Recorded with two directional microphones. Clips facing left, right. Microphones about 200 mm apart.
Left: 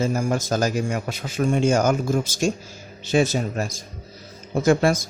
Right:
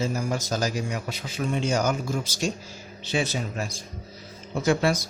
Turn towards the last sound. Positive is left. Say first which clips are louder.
# left 4 dB
turn(degrees=45)  # may be behind; listen again after turning